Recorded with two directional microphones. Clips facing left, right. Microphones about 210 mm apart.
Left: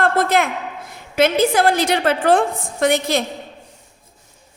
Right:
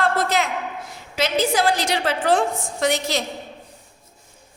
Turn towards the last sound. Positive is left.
turn(degrees=55)  # may be behind; listen again after turning